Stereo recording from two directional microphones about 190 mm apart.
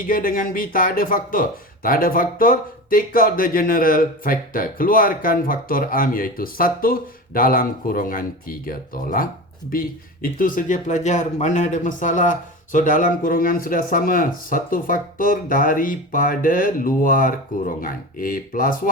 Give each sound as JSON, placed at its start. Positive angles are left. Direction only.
{"t": 0.1, "sound": "speech", "side_deg": 45}